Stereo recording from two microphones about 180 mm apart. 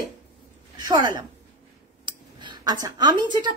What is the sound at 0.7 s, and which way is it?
A woman's voice, 25° right (ahead or behind).